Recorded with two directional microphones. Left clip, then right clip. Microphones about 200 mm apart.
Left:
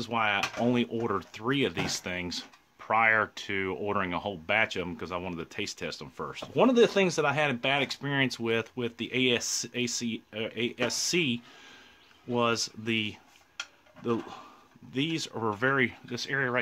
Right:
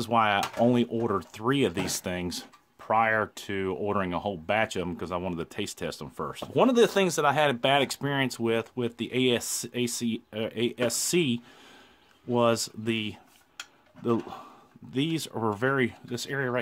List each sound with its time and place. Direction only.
0.0 s speech: 40° right (ahead or behind)